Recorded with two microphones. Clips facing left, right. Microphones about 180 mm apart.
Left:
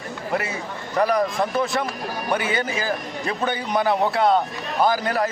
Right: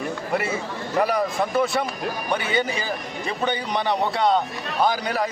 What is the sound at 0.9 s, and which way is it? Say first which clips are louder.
A man's voice: left 2 dB; 5° right (ahead or behind).